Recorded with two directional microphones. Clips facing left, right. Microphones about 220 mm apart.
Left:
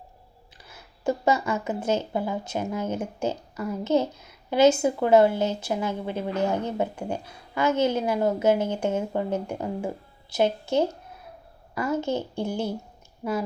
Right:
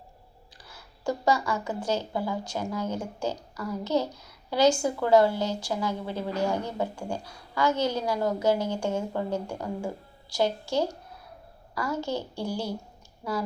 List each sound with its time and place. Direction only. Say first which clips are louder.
0.7 s a child's voice: left 4 dB; 20° left (ahead or behind)